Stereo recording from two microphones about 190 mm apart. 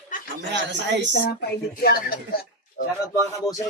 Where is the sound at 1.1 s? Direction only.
60° left (ahead or behind).